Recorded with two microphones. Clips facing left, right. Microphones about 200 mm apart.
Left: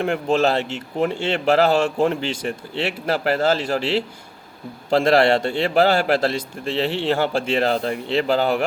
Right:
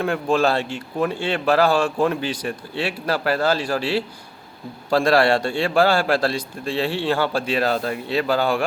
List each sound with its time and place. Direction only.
0.3 s a man's voice: 20° left (ahead or behind)